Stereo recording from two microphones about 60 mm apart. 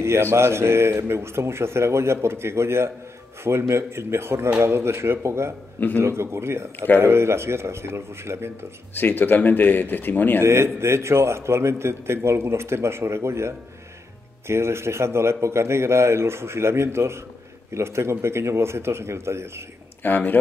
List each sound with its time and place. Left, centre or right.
0.0 s a man's voice: right
8.9 s speech: left
10.4 s a man's voice: right
20.0 s speech: left